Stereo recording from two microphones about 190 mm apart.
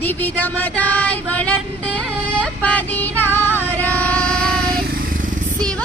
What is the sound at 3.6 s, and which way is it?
Music, 10° left (ahead or behind).